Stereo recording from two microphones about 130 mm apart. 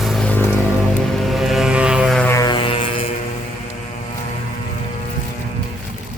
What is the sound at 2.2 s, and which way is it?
Music, 20° left (ahead or behind).